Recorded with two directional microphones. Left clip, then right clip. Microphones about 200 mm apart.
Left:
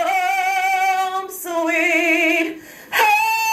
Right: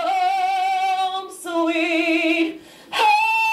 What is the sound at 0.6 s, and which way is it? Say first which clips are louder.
Music: left 2 dB; 10° left (ahead or behind).